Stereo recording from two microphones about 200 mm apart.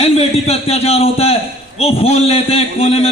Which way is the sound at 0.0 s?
30° left (ahead or behind).